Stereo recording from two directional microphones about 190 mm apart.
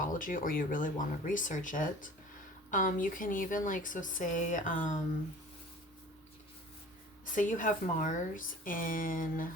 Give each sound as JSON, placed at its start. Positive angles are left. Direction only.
{"t": 0.0, "sound": "speech", "side_deg": 45}
{"t": 7.3, "sound": "speech", "side_deg": 40}